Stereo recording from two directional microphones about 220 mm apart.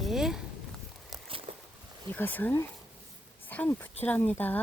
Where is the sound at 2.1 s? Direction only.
10° left (ahead or behind).